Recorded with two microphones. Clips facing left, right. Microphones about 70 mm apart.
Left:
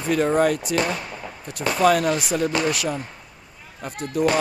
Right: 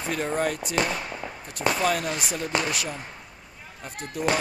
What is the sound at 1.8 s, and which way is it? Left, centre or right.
Speech, left.